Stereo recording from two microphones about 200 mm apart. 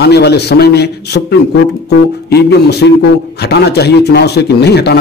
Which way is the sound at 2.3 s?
55° left (ahead or behind).